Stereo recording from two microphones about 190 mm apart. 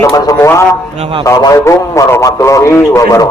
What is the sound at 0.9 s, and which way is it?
Speech, 30° right (ahead or behind).